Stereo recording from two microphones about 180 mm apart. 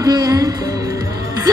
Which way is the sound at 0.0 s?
20° right (ahead or behind).